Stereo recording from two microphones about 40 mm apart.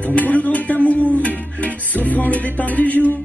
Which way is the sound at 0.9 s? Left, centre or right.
Left.